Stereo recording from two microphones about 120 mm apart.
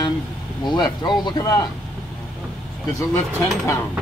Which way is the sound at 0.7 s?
40° left (ahead or behind).